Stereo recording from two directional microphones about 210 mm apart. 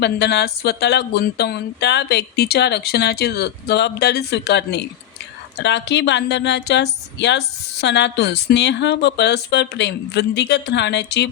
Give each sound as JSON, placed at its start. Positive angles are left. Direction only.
{"t": 0.0, "sound": "a woman's voice", "side_deg": 55}